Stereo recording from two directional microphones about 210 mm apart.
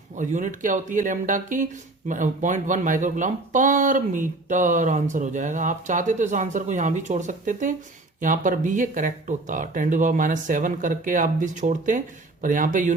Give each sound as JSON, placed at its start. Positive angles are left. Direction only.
{"t": 0.2, "sound": "speech", "side_deg": -35}